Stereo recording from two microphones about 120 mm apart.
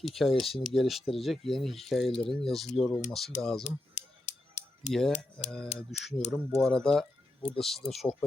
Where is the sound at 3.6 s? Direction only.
70° left (ahead or behind).